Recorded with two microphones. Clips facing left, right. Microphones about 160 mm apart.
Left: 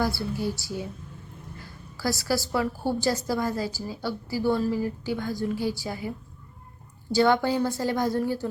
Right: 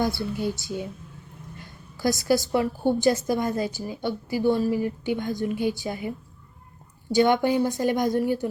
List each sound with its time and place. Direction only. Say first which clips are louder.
0.0 s a woman's voice: right 1 dB; 20° right (ahead or behind)
1.5 s a sound: even; 20° right (ahead or behind)
3.0 s a woman's voice: right 2 dB; 20° right (ahead or behind)